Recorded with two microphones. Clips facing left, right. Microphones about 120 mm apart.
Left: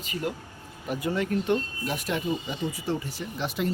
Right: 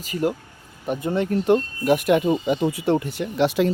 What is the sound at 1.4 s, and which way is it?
Speech, 50° right (ahead or behind).